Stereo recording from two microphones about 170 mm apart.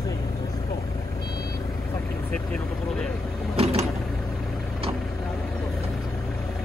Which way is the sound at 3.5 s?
35° right (ahead or behind).